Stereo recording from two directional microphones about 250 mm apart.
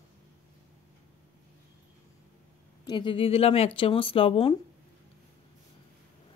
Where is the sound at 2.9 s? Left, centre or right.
Centre.